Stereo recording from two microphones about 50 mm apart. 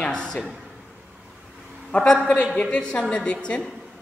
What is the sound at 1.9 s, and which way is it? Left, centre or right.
A man's voice, left.